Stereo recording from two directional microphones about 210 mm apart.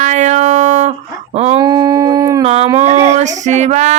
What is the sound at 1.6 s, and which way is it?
Dog, 15° right (ahead or behind).